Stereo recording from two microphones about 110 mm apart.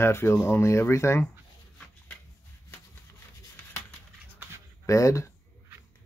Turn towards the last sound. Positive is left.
turn(degrees=30)  # may be behind; listen again after turning